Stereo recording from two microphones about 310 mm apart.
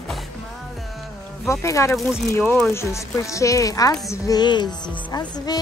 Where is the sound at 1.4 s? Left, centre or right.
Centre.